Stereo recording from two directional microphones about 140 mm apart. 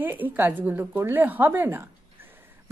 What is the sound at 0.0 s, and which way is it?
A woman's voice, 15° right (ahead or behind).